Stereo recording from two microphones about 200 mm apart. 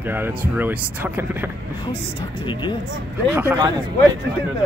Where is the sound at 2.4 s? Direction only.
25° left (ahead or behind).